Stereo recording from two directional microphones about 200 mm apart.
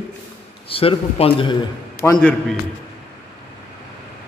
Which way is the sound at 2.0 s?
10° left (ahead or behind).